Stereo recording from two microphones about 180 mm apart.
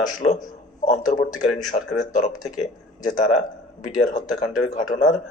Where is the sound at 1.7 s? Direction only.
40° left (ahead or behind).